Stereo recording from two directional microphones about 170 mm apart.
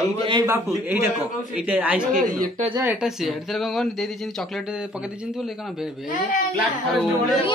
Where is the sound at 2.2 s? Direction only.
55° right (ahead or behind).